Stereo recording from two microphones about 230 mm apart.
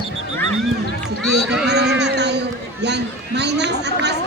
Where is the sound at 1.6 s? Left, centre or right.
Right.